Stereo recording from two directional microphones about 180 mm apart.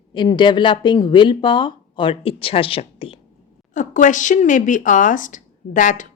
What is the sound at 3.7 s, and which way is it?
Speech, 45° left (ahead or behind).